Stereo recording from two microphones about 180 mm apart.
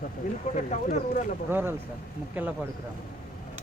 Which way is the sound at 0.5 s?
40° left (ahead or behind).